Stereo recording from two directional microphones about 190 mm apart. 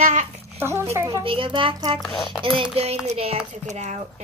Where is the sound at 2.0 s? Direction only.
5° left (ahead or behind).